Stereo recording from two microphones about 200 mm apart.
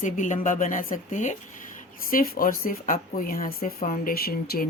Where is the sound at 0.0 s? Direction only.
40° left (ahead or behind).